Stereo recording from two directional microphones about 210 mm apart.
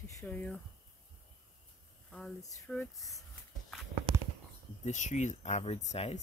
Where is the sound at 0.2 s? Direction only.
5° left (ahead or behind).